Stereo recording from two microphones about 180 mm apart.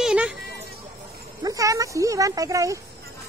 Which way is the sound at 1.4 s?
20° right (ahead or behind).